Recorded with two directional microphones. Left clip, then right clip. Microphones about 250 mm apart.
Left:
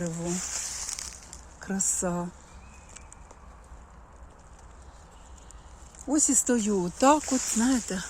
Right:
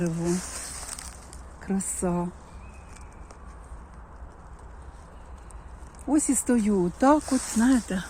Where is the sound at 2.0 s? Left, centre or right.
Left.